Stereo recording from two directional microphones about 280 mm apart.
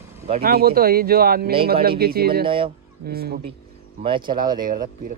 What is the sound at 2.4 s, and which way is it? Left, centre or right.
Speech, centre.